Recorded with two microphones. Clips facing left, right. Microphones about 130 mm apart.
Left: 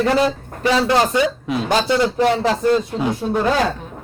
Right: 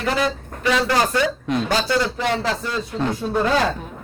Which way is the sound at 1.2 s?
5° left (ahead or behind).